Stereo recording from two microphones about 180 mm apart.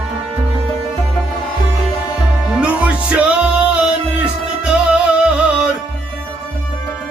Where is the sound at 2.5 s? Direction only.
5° right (ahead or behind).